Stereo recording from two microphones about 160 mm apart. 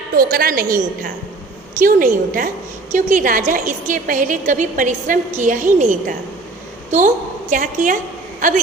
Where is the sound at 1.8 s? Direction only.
60° right (ahead or behind).